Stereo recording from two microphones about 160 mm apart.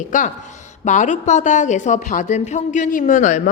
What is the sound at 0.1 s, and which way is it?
A woman's voice, 50° left (ahead or behind).